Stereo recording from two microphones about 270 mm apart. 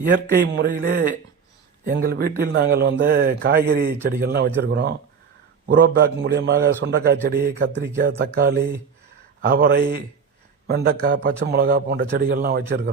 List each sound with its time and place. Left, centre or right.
0.3 s a man's voice: right